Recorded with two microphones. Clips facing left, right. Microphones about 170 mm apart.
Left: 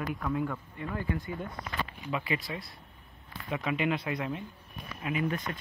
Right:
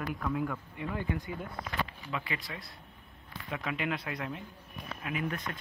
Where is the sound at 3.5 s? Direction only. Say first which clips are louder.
Left 4 dB; 5° left (ahead or behind).